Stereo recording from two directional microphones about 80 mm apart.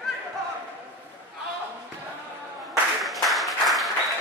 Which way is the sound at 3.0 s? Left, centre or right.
Centre.